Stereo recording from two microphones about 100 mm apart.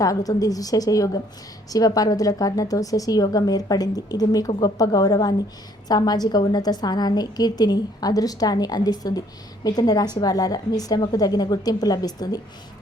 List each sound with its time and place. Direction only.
0.0 s a woman's voice: 35° left (ahead or behind)